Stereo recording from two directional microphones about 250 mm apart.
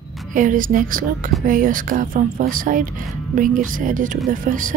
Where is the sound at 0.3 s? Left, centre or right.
Right.